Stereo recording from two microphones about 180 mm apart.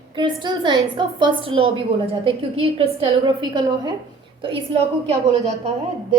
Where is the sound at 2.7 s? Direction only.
30° right (ahead or behind).